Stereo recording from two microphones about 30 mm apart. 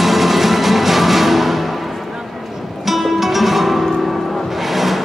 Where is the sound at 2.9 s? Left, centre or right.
Centre.